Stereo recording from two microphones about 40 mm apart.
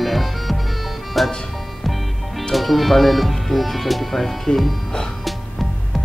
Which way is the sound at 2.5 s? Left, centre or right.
Centre.